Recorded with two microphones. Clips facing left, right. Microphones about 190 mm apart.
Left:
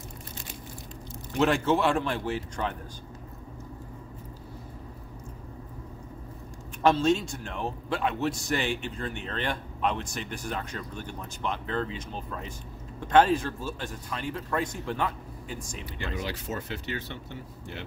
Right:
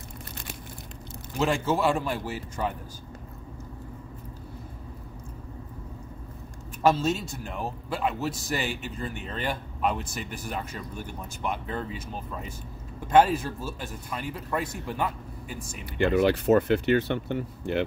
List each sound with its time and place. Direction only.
1.3 s a man's voice: centre (ahead or behind)
6.8 s a man's voice: 5° right (ahead or behind)
15.8 s speech: 60° right (ahead or behind)